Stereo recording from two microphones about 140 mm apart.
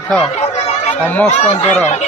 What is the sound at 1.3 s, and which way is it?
Speech, 50° left (ahead or behind).